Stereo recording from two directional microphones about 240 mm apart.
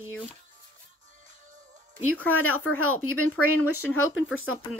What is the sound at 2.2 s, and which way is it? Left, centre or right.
Speech, left.